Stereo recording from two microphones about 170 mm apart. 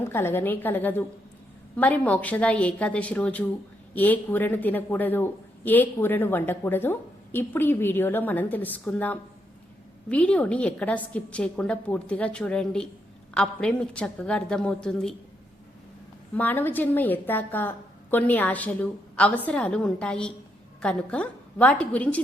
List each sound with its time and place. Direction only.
0.0 s a woman's voice: 15° left (ahead or behind)
16.3 s a woman's voice: 10° left (ahead or behind)